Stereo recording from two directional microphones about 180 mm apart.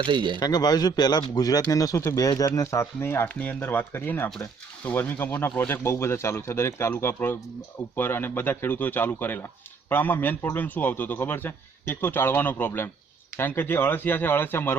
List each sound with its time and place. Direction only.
0.0 s speech: 25° right (ahead or behind)
0.3 s a man's voice: 20° left (ahead or behind)